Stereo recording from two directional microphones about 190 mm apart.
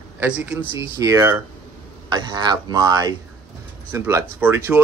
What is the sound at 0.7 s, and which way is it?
Speech, 15° right (ahead or behind).